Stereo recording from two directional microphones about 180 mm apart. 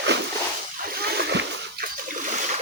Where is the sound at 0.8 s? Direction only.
55° right (ahead or behind).